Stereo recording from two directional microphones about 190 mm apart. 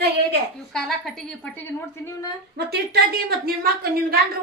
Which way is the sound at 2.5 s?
60° right (ahead or behind).